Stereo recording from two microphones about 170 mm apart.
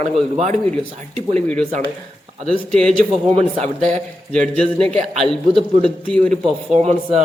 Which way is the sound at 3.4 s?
40° right (ahead or behind).